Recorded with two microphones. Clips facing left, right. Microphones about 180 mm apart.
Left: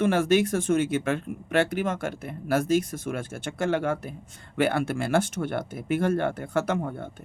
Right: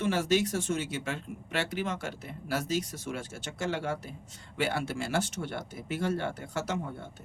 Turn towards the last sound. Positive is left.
turn(degrees=55)  # may be behind; listen again after turning